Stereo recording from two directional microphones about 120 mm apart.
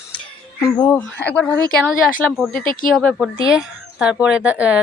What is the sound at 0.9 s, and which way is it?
Speech, 10° left (ahead or behind).